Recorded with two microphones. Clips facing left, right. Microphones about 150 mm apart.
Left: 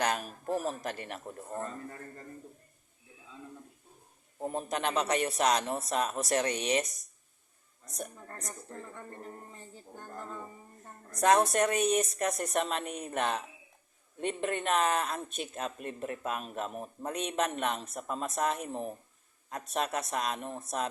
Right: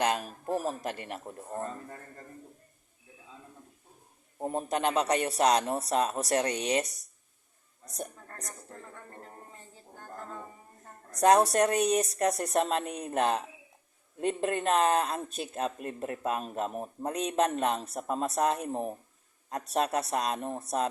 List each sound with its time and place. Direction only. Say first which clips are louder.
0.0 s a sound: right 2 dB; 25° right (ahead or behind)
0.8 s a man's voice: right 2 dB; 25° right (ahead or behind)
4.5 s speech: right 3 dB; 30° right (ahead or behind)
11.2 s speech: right 3 dB; 35° right (ahead or behind)